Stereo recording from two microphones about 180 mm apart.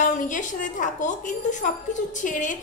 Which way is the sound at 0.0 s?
45° left (ahead or behind).